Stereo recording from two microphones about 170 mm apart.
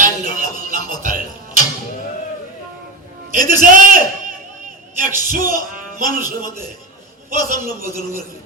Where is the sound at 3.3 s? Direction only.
55° right (ahead or behind).